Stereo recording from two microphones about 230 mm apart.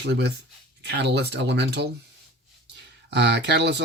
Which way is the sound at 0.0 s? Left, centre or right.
Right.